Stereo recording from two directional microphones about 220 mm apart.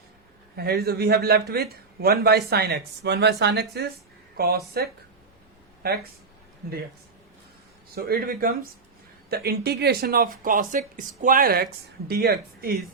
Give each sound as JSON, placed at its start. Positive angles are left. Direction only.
{"t": 0.5, "sound": "speech", "side_deg": -45}
{"t": 7.9, "sound": "speech", "side_deg": -45}